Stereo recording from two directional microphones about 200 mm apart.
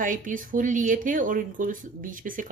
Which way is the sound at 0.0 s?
40° right (ahead or behind).